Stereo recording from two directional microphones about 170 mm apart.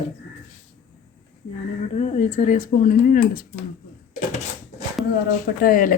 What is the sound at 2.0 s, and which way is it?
Speech, 40° left (ahead or behind).